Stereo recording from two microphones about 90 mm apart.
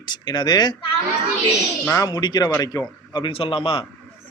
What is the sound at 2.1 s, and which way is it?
A man's voice, 50° left (ahead or behind).